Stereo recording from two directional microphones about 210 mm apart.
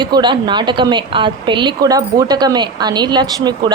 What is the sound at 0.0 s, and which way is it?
A woman's voice, 20° right (ahead or behind).